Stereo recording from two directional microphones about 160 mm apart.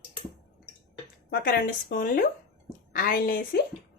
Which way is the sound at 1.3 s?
65° left (ahead or behind).